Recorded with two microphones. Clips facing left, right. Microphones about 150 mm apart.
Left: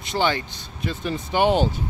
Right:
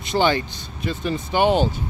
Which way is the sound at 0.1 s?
20° right (ahead or behind).